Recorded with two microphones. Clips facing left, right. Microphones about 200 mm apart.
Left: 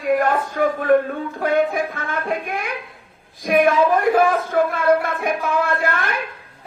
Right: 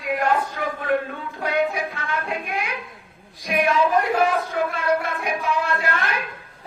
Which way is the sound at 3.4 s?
50° left (ahead or behind).